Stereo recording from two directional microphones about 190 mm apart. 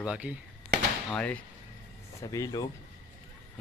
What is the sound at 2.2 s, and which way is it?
Speech, 20° left (ahead or behind).